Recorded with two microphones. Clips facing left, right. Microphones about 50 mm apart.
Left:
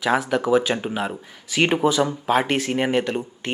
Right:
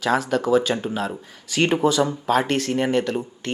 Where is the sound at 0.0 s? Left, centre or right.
Centre.